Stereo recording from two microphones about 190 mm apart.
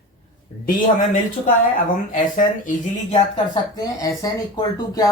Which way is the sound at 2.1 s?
45° left (ahead or behind).